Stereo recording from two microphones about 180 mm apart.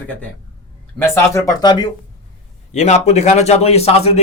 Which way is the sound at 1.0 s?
15° left (ahead or behind).